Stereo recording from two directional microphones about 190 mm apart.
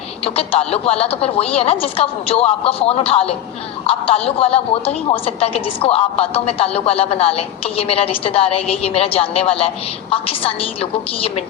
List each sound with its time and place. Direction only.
0.3 s a woman's voice: 30° left (ahead or behind)